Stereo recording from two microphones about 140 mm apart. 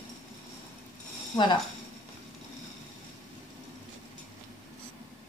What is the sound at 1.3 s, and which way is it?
Speech, 35° left (ahead or behind).